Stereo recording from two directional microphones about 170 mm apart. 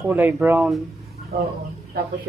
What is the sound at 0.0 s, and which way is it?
Speech, 15° right (ahead or behind).